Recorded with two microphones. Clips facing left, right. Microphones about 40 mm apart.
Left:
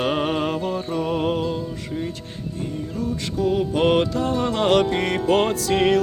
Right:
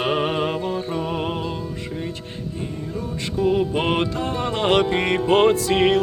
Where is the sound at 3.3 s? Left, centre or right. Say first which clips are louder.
Right 2 dB; centre.